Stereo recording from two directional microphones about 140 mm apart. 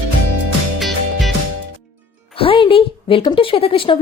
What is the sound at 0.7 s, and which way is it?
Music, centre (ahead or behind).